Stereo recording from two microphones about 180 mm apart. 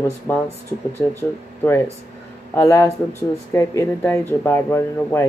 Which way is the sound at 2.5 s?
15° left (ahead or behind).